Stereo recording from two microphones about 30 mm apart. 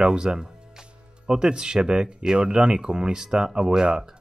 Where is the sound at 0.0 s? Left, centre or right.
Right.